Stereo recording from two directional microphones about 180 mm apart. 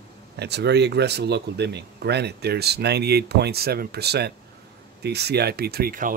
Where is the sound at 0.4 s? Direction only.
70° right (ahead or behind).